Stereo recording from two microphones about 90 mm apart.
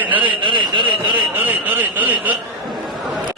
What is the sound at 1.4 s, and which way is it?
Speech, 20° right (ahead or behind).